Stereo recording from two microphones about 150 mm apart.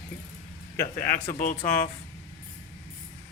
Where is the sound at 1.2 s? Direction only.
60° left (ahead or behind).